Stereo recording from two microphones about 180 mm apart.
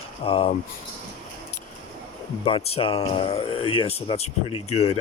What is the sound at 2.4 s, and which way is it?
Speech, 30° left (ahead or behind).